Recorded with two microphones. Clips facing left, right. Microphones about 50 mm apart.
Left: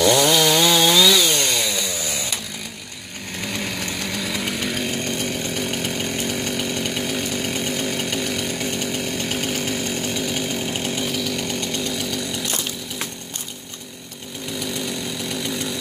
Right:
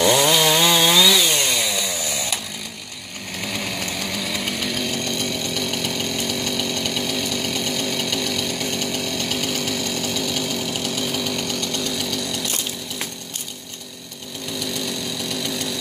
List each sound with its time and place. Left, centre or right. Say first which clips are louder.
0.0 s chainsaw: even; centre
3.3 s chainsaw: even; centre
4.7 s chainsaw: even; left
11.1 s chainsaw: even; centre
11.4 s chainsaw: even; centre
14.6 s chainsaw: even; centre